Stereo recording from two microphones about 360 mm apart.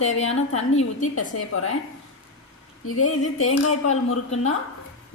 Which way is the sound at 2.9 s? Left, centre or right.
Left.